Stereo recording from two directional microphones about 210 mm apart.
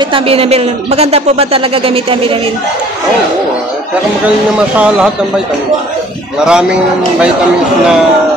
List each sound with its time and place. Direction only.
0.1 s speech: 25° right (ahead or behind)
4.7 s speech: 5° right (ahead or behind)
6.4 s speech: 5° right (ahead or behind)